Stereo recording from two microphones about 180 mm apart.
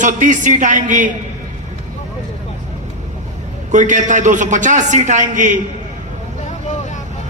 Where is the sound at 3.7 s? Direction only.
45° right (ahead or behind).